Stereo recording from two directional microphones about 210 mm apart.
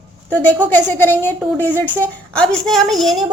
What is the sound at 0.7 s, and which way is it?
A woman's voice, 10° left (ahead or behind).